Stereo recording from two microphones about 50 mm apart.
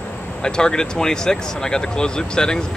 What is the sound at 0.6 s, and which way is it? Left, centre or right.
Speech, centre.